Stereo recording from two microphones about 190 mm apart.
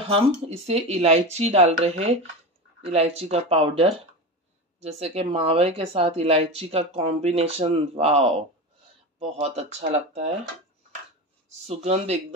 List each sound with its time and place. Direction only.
0.1 s speech: 30° right (ahead or behind)
11.6 s speech: 35° right (ahead or behind)